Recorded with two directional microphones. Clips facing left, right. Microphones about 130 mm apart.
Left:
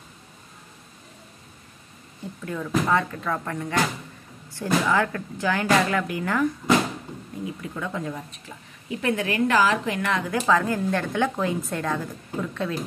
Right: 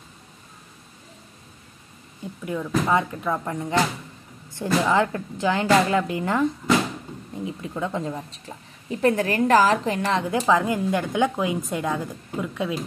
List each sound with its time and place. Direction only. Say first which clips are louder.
2.4 s a woman's voice: right 1 dB; 15° right (ahead or behind)
8.8 s a woman's voice: right 4 dB; 40° right (ahead or behind)
10.5 s a woman's voice: right 1 dB; 15° right (ahead or behind)